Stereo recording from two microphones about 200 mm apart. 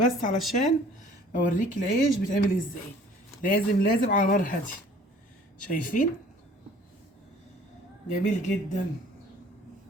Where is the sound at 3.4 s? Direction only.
40° left (ahead or behind).